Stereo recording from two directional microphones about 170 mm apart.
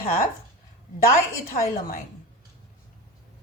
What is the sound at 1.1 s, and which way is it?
Speech, 50° left (ahead or behind).